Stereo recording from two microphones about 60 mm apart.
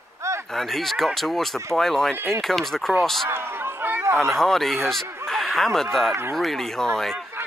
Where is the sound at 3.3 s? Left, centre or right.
Right.